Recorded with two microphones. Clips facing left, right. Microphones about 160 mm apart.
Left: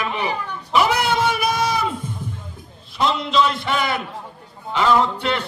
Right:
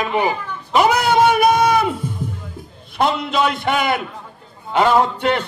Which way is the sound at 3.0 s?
55° right (ahead or behind).